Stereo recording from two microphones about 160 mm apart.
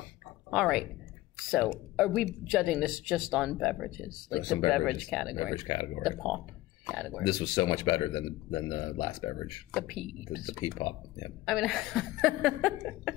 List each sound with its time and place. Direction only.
0.5 s speech: 5° right (ahead or behind)
4.4 s a man's voice: 25° left (ahead or behind)
4.6 s speech: centre (ahead or behind)
5.5 s a man's voice: 30° left (ahead or behind)
6.0 s speech: 5° right (ahead or behind)
7.2 s a man's voice: 25° left (ahead or behind)
9.7 s speech: centre (ahead or behind)
10.8 s a man's voice: 30° left (ahead or behind)
11.4 s speech: centre (ahead or behind)